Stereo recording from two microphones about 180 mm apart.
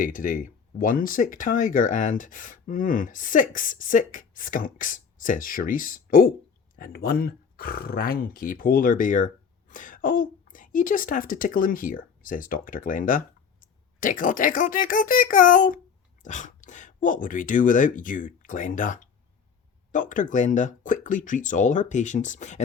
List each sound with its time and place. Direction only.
0.0 s speech: 50° left (ahead or behind)